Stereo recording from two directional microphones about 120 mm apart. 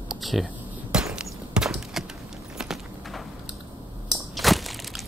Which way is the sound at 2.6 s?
5° right (ahead or behind).